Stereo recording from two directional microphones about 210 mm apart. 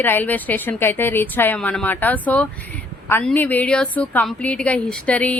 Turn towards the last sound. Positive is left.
turn(degrees=5)  # may be behind; listen again after turning